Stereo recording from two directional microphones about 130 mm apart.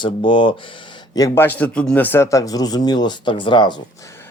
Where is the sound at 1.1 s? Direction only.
30° left (ahead or behind).